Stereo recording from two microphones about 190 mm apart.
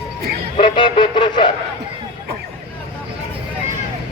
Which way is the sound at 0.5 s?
25° left (ahead or behind).